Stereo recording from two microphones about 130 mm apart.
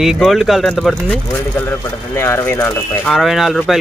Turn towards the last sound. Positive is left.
turn(degrees=0)  # may be behind; listen again after turning